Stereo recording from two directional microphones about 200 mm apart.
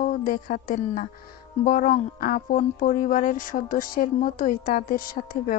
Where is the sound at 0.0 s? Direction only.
45° left (ahead or behind).